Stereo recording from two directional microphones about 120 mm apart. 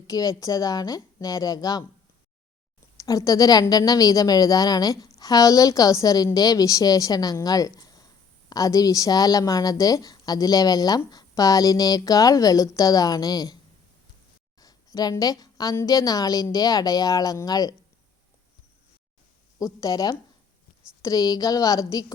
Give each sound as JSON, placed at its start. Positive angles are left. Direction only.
{"t": 0.1, "sound": "a woman's voice", "side_deg": 30}
{"t": 3.0, "sound": "a woman's voice", "side_deg": 30}
{"t": 14.6, "sound": "a woman's voice", "side_deg": 30}
{"t": 19.5, "sound": "a woman's voice", "side_deg": 30}